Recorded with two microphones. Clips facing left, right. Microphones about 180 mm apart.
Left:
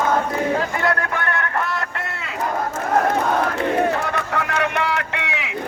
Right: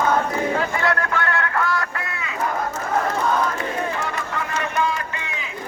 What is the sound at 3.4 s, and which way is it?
Battle cry, 65° left (ahead or behind).